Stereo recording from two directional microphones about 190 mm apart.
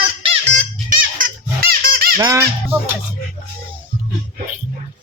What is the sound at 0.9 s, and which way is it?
Music, 50° right (ahead or behind).